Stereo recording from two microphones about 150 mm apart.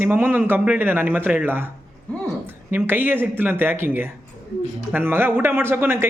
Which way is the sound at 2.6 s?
15° right (ahead or behind).